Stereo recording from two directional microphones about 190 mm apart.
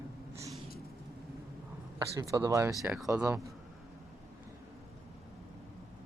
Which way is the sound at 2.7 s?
5° right (ahead or behind).